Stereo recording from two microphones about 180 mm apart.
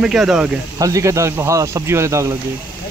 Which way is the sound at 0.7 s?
20° right (ahead or behind).